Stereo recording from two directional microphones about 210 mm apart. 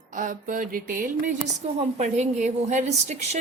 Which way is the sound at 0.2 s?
40° right (ahead or behind).